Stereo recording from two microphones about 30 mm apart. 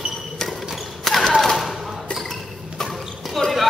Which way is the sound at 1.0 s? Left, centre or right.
Centre.